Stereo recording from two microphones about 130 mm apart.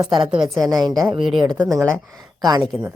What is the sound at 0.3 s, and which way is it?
Speech, centre (ahead or behind).